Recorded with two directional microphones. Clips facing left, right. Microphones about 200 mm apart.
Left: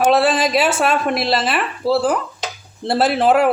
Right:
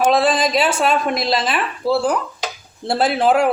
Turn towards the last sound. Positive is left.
turn(degrees=5)  # may be behind; listen again after turning